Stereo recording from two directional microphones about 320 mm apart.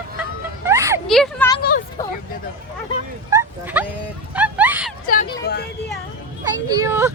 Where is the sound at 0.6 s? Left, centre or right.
Centre.